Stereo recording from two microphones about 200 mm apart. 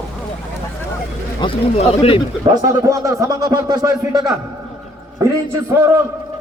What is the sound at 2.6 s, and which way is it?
Speech, 15° right (ahead or behind).